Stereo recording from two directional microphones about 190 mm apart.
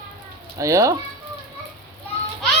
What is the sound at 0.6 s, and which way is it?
Speech, 15° right (ahead or behind).